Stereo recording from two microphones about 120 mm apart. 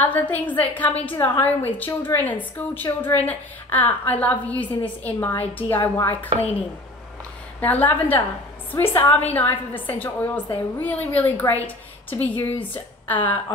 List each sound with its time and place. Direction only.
0.0 s a woman's voice: 15° left (ahead or behind)
5.8 s speech: 25° left (ahead or behind)
7.6 s a woman's voice: 15° left (ahead or behind)